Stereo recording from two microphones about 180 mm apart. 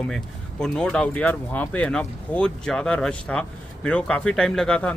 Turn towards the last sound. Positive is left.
turn(degrees=5)  # may be behind; listen again after turning